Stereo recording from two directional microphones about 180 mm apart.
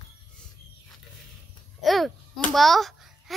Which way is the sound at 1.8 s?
Centre (ahead or behind).